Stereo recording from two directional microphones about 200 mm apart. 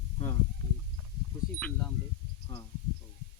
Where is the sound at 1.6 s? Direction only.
5° left (ahead or behind).